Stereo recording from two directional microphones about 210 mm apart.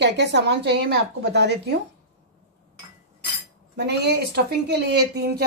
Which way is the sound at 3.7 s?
50° right (ahead or behind).